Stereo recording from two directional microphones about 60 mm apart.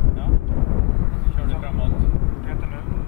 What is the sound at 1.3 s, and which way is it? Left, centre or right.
Vehicle, centre.